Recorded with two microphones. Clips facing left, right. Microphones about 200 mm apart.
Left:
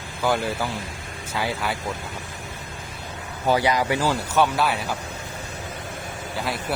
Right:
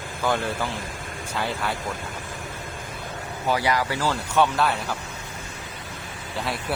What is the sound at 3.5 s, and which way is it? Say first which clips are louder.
Speech: left 3 dB; 20° left (ahead or behind).